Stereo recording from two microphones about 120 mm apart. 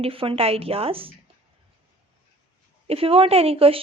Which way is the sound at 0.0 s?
50° right (ahead or behind).